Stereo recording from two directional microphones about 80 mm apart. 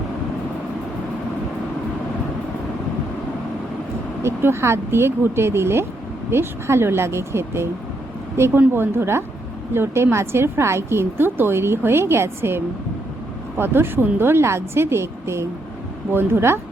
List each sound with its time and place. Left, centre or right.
4.2 s a woman's voice: right